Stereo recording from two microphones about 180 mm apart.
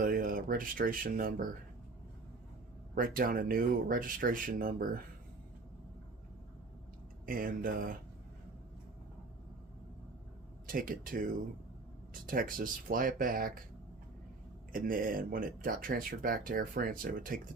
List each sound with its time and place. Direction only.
0.0 s speech: 50° right (ahead or behind)
2.9 s speech: 50° right (ahead or behind)
7.3 s speech: 50° right (ahead or behind)
10.7 s speech: 50° right (ahead or behind)
14.7 s speech: 50° right (ahead or behind)